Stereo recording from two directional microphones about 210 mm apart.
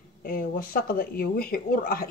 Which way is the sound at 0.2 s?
40° left (ahead or behind).